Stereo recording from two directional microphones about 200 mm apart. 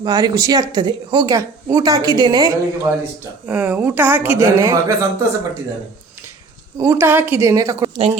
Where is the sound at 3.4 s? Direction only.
10° right (ahead or behind).